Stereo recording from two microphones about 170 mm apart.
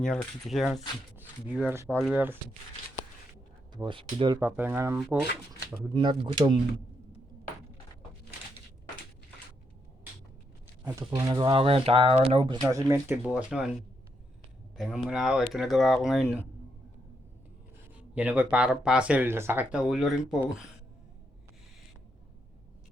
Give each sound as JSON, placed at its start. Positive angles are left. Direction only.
{"t": 0.0, "sound": "speech", "side_deg": 5}
{"t": 3.7, "sound": "speech", "side_deg": -25}
{"t": 4.4, "sound": "speech", "side_deg": -10}
{"t": 5.9, "sound": "speech", "side_deg": -25}
{"t": 11.0, "sound": "speech", "side_deg": -25}
{"t": 12.7, "sound": "speech", "side_deg": -15}
{"t": 14.8, "sound": "speech", "side_deg": 0}
{"t": 17.9, "sound": "speech", "side_deg": -10}
{"t": 19.9, "sound": "speech", "side_deg": 0}